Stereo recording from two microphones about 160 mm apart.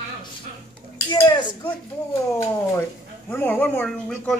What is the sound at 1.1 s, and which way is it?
Dishes, 25° left (ahead or behind).